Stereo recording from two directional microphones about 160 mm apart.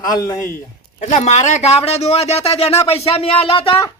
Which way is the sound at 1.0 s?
45° left (ahead or behind).